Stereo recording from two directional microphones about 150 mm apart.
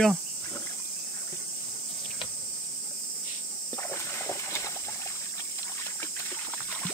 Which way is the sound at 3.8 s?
15° left (ahead or behind).